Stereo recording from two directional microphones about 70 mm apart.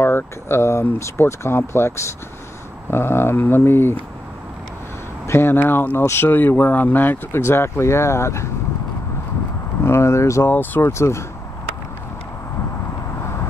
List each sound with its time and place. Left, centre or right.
0.0 s speech: left
5.2 s a sound: left
5.6 s speech: left
9.8 s speech: left
10.4 s speech: left
10.9 s speech: left